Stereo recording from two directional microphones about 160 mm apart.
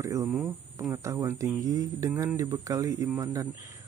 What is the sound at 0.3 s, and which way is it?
Speech, 5° right (ahead or behind).